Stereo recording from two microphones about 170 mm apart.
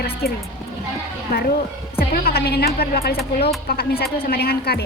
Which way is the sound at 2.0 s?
65° left (ahead or behind).